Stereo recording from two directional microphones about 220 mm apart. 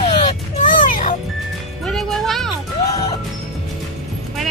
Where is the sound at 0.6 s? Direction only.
35° left (ahead or behind).